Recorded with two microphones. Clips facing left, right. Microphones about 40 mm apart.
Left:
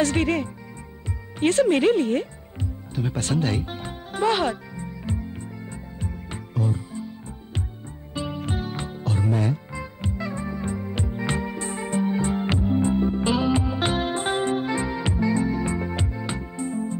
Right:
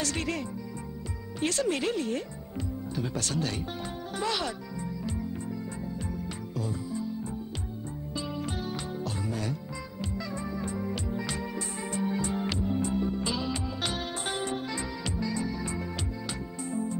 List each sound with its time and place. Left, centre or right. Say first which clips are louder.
0.0 s speech: left 10 dB; left
2.9 s music: left 7 dB; left
8.1 s music: left 6 dB; left